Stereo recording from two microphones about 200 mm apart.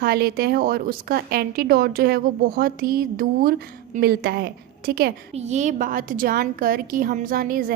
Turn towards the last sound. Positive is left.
turn(degrees=-45)  # may be behind; listen again after turning